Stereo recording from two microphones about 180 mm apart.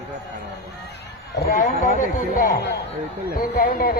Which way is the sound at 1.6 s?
45° left (ahead or behind).